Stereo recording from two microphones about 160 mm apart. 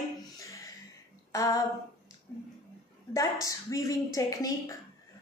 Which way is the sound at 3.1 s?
20° left (ahead or behind).